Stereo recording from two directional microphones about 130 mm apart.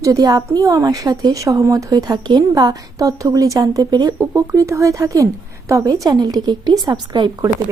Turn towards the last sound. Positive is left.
turn(degrees=-30)  # may be behind; listen again after turning